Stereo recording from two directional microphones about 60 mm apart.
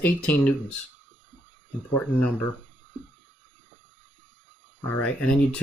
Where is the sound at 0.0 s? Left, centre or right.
Left.